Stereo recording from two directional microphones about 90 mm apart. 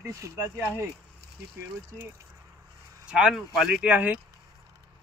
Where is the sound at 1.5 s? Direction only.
25° right (ahead or behind).